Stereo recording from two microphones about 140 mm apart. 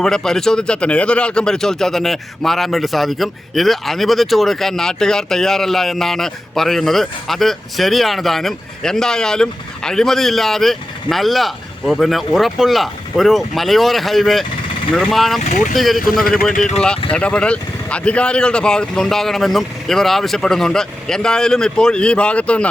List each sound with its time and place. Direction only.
0.0 s speech: 5° left (ahead or behind)
15.4 s speech: 60° left (ahead or behind)
15.7 s speech: centre (ahead or behind)
17.1 s speech: 10° left (ahead or behind)